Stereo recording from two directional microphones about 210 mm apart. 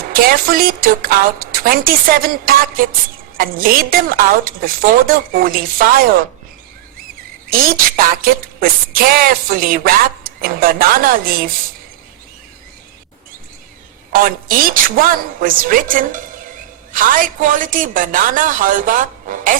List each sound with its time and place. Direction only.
0.1 s a woman's voice: 45° right (ahead or behind)
7.4 s a woman's voice: 45° right (ahead or behind)
14.1 s a woman's voice: 40° right (ahead or behind)